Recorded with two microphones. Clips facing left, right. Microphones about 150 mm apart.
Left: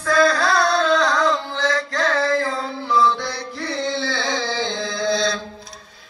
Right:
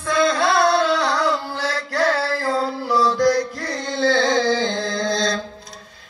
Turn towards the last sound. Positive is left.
turn(degrees=-45)  # may be behind; listen again after turning